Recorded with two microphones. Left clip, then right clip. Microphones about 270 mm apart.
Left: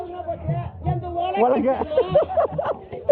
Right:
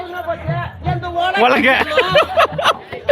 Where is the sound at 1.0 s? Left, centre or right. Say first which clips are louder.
Right 6 dB; right.